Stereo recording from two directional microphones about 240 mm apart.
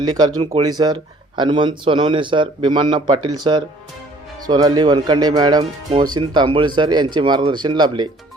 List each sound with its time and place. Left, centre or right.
0.0 s speech: centre